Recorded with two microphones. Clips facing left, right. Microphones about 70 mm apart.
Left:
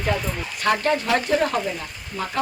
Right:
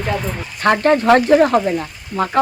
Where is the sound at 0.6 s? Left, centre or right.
Right.